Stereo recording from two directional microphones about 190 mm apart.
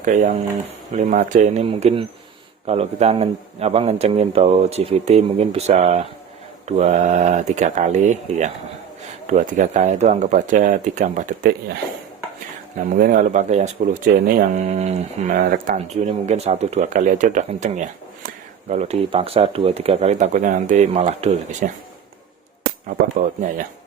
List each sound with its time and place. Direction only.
0.0 s speech: 40° right (ahead or behind)
12.7 s speech: 45° right (ahead or behind)
22.9 s speech: 45° right (ahead or behind)